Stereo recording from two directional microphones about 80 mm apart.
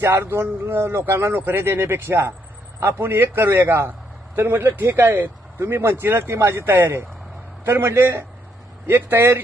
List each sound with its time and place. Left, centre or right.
0.0 s speech: right